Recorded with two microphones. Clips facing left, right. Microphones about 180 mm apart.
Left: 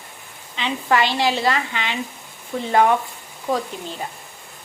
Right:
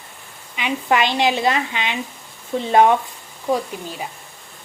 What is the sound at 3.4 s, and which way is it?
Speech, 10° right (ahead or behind).